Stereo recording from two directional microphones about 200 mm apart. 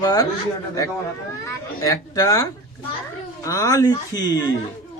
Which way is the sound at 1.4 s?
15° left (ahead or behind).